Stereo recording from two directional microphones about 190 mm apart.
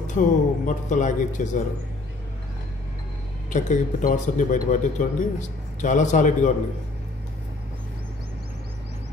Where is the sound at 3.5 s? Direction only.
40° left (ahead or behind).